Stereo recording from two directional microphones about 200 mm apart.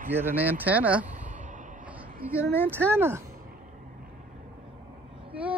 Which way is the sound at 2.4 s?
10° left (ahead or behind).